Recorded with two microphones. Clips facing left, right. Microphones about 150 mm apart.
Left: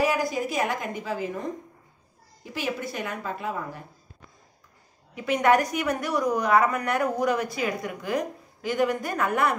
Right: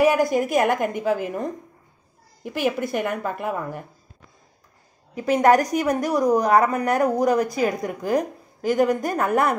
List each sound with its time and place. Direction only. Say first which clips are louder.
0.0 s a woman's voice: right 6 dB; 60° right (ahead or behind)
2.4 s speech: right 7 dB; 55° right (ahead or behind)
5.1 s speech: right 4 dB; 40° right (ahead or behind)